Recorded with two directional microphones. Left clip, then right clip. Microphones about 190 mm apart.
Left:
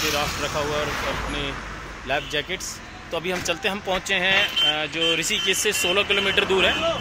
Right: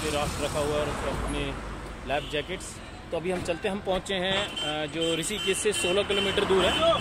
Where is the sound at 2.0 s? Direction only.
30° left (ahead or behind).